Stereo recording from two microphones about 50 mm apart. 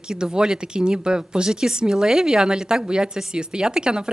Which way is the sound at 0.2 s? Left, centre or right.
Centre.